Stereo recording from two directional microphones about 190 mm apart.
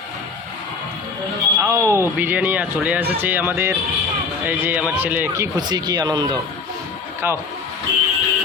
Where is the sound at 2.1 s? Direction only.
10° right (ahead or behind).